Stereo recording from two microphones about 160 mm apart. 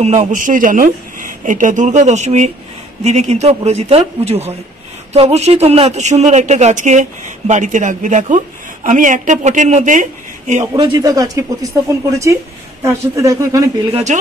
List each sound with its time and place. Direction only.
0.0 s speech: 45° right (ahead or behind)
10.8 s a man's voice: 25° right (ahead or behind)